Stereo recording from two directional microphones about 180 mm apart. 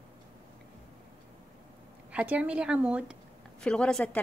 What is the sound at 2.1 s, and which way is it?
A woman's voice, 5° right (ahead or behind).